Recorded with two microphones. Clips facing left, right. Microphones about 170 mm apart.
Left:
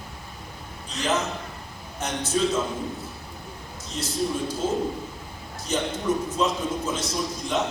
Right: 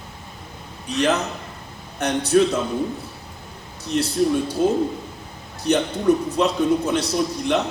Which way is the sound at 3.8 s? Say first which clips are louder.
Right 8 dB; 65° right (ahead or behind).